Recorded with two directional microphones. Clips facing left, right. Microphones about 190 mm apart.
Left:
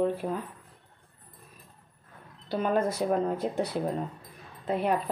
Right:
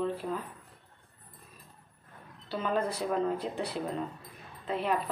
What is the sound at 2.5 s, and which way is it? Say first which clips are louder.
Speech: left 4 dB; 50° left (ahead or behind).